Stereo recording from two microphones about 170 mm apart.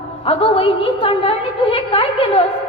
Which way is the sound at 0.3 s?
35° left (ahead or behind).